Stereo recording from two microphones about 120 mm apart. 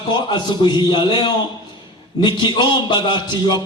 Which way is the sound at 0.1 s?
40° left (ahead or behind).